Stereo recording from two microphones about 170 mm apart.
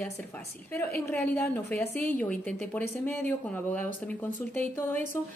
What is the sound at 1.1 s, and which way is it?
A woman's voice, 10° left (ahead or behind).